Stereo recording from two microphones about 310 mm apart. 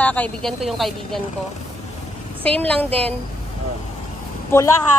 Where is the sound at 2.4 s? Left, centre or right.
Centre.